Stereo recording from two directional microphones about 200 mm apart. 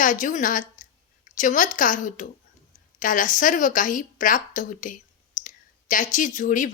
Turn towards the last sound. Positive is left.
turn(degrees=40)  # may be behind; listen again after turning